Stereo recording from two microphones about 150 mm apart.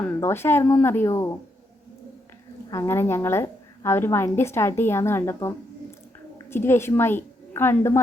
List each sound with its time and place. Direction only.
0.2 s speech: 15° left (ahead or behind)
2.6 s a woman's voice: 20° left (ahead or behind)